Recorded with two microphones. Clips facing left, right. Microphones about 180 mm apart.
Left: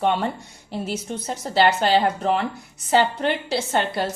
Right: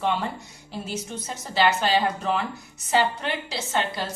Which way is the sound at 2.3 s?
30° left (ahead or behind).